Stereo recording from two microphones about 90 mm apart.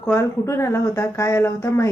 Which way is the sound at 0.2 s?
30° left (ahead or behind).